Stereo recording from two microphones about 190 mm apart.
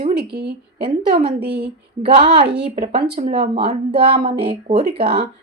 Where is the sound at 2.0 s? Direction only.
30° right (ahead or behind).